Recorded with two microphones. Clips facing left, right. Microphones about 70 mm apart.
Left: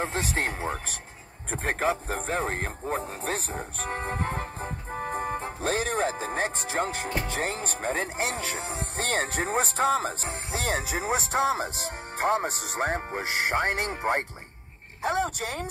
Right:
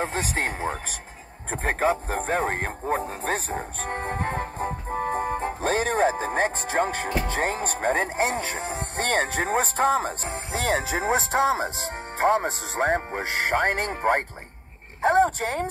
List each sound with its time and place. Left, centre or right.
0.0 s speech: right
13.1 s speech: right